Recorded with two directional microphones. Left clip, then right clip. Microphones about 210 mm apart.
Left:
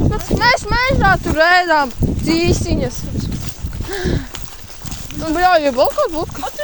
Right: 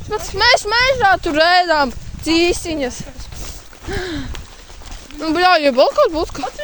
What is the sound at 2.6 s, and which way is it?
A woman's voice, 20° right (ahead or behind).